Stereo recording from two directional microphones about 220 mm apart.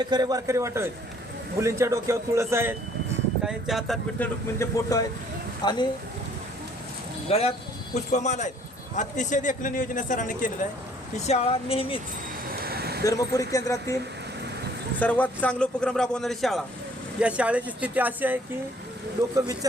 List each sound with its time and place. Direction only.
0.0 s speech: 20° right (ahead or behind)
3.4 s a man's voice: centre (ahead or behind)
4.5 s speech: 15° left (ahead or behind)
7.3 s speech: 30° left (ahead or behind)
11.3 s speech: 25° left (ahead or behind)
12.5 s a sound: 45° right (ahead or behind)
13.1 s a man's voice: 15° left (ahead or behind); by 18.3 s 10° right (ahead or behind)